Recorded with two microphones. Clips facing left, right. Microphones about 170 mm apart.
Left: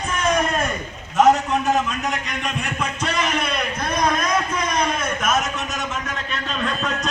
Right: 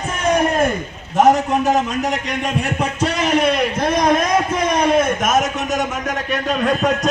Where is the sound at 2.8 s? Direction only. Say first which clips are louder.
Right 3 dB; 45° right (ahead or behind).